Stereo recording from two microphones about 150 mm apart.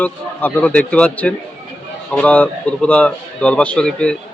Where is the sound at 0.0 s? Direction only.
10° left (ahead or behind).